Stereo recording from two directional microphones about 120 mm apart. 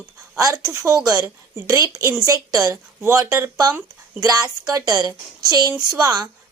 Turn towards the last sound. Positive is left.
turn(degrees=-30)  # may be behind; listen again after turning